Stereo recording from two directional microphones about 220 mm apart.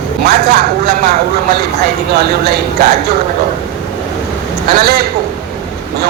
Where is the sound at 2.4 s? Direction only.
45° right (ahead or behind).